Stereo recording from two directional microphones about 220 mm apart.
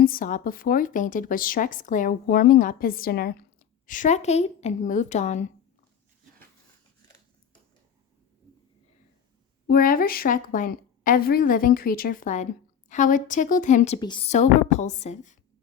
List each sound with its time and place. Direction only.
0.0 s a woman's voice: 40° left (ahead or behind)
9.6 s a woman's voice: 40° left (ahead or behind)